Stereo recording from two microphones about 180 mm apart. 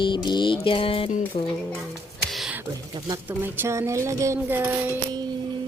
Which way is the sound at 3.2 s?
10° right (ahead or behind).